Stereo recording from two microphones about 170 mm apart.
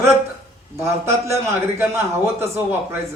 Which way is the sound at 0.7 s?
15° right (ahead or behind).